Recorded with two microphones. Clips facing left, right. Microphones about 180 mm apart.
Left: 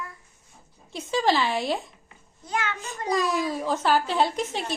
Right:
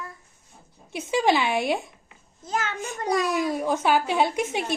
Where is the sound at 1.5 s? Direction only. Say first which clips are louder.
Right 2 dB; 55° right (ahead or behind).